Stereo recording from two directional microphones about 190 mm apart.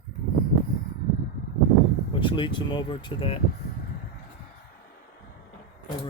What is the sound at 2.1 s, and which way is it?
Speech, 25° left (ahead or behind).